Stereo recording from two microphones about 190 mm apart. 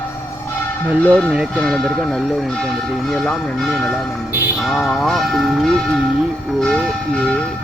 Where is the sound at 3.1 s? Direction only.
Centre (ahead or behind).